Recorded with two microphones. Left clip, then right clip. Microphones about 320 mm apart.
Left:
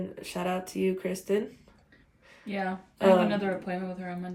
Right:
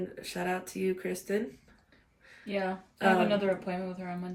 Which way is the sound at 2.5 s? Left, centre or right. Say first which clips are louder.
Even; centre.